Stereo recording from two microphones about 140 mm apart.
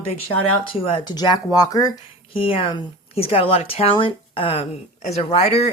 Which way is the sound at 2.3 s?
40° left (ahead or behind).